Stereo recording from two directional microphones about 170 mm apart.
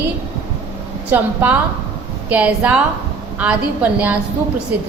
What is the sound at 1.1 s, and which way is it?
A woman's voice, 10° right (ahead or behind).